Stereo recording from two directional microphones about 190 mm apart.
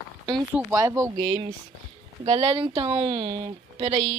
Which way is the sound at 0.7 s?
15° right (ahead or behind).